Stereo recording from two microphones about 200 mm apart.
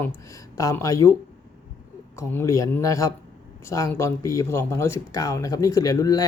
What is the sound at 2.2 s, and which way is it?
Speech, 15° left (ahead or behind).